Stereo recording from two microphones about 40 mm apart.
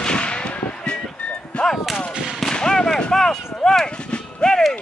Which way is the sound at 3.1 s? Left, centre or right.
Centre.